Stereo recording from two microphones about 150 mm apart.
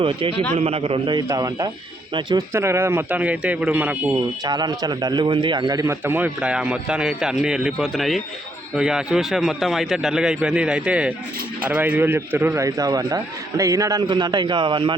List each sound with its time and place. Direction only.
0.0 s a man's voice: 35° right (ahead or behind)
1.3 s a man's voice: 25° right (ahead or behind)
4.4 s a man's voice: 25° right (ahead or behind)